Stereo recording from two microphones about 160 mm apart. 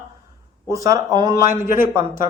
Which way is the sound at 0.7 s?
20° right (ahead or behind).